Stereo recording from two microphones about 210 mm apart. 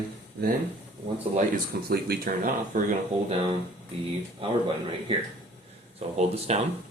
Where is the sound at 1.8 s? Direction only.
50° right (ahead or behind).